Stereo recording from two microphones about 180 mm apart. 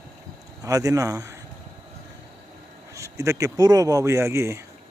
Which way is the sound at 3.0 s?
15° right (ahead or behind).